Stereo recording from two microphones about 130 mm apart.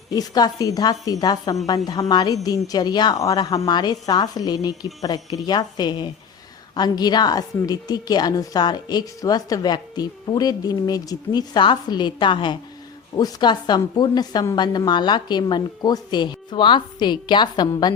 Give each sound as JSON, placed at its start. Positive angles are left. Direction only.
{"t": 0.1, "sound": "a woman's voice", "side_deg": 30}